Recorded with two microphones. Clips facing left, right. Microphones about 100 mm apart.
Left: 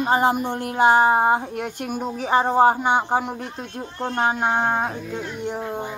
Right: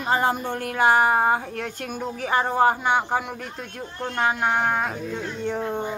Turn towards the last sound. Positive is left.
turn(degrees=15)  # may be behind; listen again after turning